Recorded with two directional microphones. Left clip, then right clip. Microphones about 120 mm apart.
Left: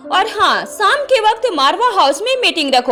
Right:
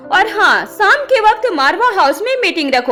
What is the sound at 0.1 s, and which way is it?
A woman's voice, 55° left (ahead or behind).